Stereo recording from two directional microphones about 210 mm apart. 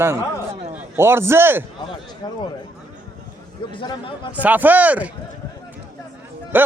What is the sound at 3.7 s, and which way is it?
Speech, 25° left (ahead or behind).